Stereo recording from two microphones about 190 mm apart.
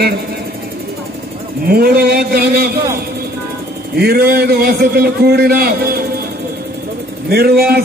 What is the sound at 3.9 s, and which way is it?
A man's voice, 55° right (ahead or behind).